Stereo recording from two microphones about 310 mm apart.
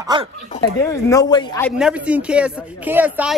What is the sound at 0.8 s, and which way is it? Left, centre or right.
Speech, centre.